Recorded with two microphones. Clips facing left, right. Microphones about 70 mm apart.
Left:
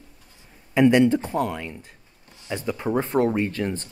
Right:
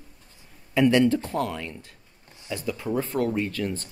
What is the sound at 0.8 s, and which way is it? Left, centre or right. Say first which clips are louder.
Speech: left 3 dB; centre.